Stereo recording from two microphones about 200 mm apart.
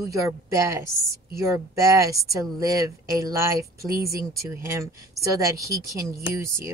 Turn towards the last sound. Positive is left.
turn(degrees=-15)  # may be behind; listen again after turning